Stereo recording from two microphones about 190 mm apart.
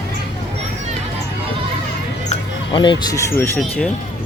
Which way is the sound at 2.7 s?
25° left (ahead or behind).